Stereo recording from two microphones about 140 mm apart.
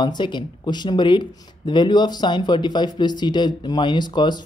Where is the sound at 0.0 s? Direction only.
35° left (ahead or behind).